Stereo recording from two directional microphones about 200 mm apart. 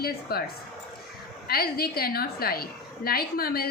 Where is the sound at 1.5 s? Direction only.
50° left (ahead or behind).